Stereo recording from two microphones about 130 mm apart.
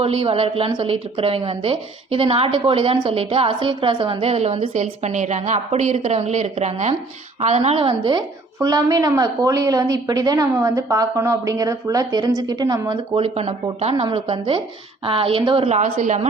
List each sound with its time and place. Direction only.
0.0 s a woman's voice: 45° right (ahead or behind)
8.5 s a woman's voice: 30° right (ahead or behind)
13.1 s a woman's voice: 50° right (ahead or behind)
13.9 s a woman's voice: 40° right (ahead or behind)
15.8 s speech: 65° right (ahead or behind)